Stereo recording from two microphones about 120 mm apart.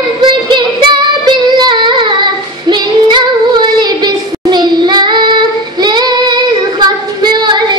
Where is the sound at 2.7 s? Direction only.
40° right (ahead or behind).